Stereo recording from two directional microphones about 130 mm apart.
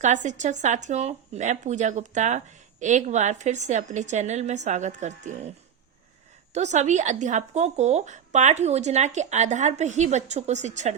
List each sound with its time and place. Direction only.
0.0 s a woman's voice: 65° right (ahead or behind)
6.5 s speech: 60° right (ahead or behind)